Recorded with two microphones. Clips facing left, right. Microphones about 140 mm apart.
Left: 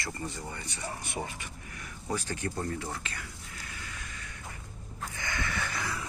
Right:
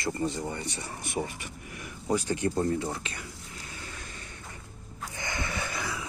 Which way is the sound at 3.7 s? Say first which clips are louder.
Right 2 dB; 30° right (ahead or behind).